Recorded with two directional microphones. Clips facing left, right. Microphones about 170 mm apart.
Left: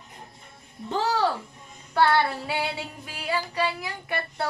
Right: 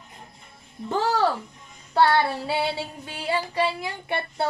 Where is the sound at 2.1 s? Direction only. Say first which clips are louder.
Right 1 dB; 30° right (ahead or behind).